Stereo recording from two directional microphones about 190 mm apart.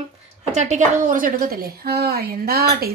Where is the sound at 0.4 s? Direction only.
35° right (ahead or behind).